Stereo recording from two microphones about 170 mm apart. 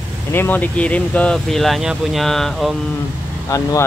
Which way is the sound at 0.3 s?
10° left (ahead or behind).